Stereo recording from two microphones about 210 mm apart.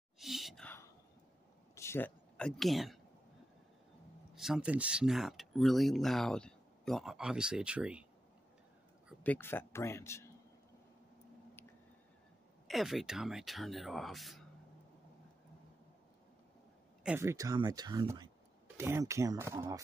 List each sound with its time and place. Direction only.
0.2 s a sound: centre (ahead or behind)
1.8 s speech: 10° left (ahead or behind)
4.4 s speech: 5° right (ahead or behind)
9.2 s speech: 10° left (ahead or behind)
12.6 s speech: centre (ahead or behind)
17.0 s speech: 10° right (ahead or behind)